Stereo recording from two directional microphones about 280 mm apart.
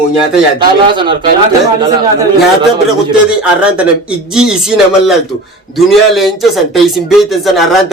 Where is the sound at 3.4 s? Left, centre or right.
Centre.